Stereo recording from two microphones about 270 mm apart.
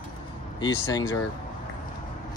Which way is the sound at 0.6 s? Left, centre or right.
Centre.